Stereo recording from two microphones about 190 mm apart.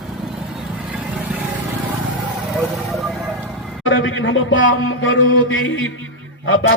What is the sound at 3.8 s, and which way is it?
Music, 90° left.